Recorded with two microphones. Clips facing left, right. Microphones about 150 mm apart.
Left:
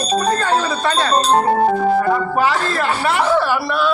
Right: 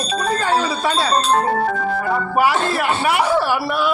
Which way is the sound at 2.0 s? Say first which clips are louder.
Left 2 dB; 10° right (ahead or behind).